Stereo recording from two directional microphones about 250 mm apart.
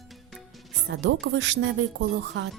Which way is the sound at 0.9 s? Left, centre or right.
Right.